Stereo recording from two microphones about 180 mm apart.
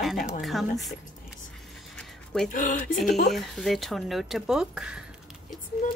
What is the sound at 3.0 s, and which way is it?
Speech, 65° left (ahead or behind).